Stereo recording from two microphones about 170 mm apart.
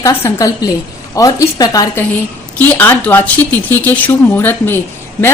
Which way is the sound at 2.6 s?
10° left (ahead or behind).